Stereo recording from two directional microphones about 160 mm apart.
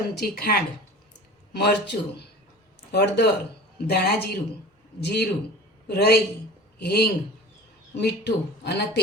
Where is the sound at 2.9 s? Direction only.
90° left.